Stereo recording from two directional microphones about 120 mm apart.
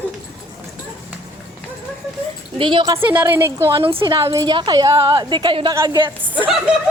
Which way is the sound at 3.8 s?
50° right (ahead or behind).